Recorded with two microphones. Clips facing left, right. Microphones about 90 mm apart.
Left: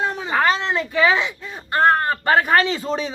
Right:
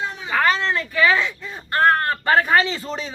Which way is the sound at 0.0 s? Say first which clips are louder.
Left 5 dB; 45° left (ahead or behind).